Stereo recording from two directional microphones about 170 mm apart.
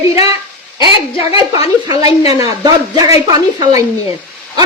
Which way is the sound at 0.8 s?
30° left (ahead or behind).